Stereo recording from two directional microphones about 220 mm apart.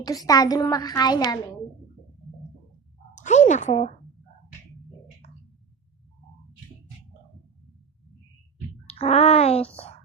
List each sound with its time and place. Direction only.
0.0 s a woman's voice: 15° left (ahead or behind)
3.2 s speech: 35° left (ahead or behind)
8.9 s a child's voice: 30° left (ahead or behind)